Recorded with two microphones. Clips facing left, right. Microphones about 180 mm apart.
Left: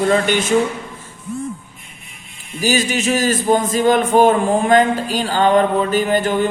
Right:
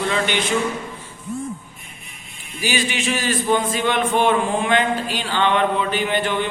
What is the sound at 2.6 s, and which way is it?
Speech, 40° left (ahead or behind).